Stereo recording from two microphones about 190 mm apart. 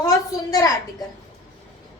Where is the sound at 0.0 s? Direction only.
20° left (ahead or behind).